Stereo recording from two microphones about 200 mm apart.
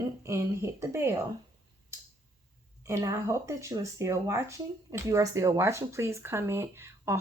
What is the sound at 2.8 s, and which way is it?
Speech, 15° right (ahead or behind).